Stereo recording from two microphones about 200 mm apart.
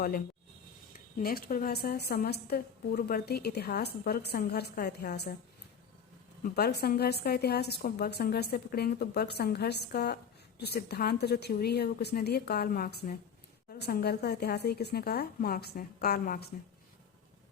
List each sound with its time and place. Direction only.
1.2 s a woman's voice: 50° left (ahead or behind)
6.4 s a woman's voice: 55° left (ahead or behind)